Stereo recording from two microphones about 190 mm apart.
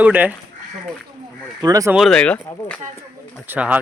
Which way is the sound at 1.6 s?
20° right (ahead or behind).